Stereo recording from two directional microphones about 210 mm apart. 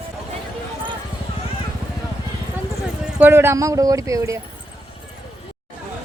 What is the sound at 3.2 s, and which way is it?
Speech, 10° right (ahead or behind).